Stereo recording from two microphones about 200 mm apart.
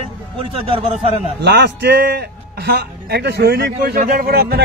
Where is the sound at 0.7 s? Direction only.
30° right (ahead or behind).